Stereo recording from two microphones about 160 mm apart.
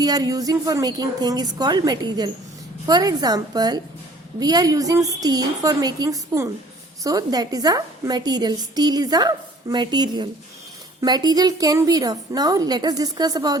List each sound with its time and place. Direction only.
0.0 s a woman's voice: 25° right (ahead or behind)